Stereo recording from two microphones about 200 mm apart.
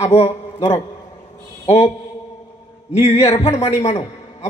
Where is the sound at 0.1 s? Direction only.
30° left (ahead or behind).